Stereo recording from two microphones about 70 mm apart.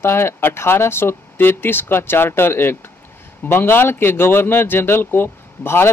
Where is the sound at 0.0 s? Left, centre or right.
Left.